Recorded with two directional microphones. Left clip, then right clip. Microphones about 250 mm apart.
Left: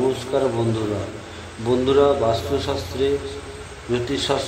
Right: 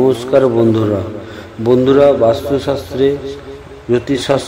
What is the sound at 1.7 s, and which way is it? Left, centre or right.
A man's voice, right.